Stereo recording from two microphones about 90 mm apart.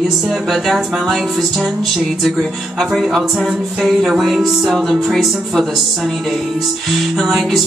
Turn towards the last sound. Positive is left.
turn(degrees=0)  # may be behind; listen again after turning